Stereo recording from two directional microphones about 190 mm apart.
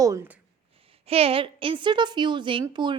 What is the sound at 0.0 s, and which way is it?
Speech, 15° right (ahead or behind).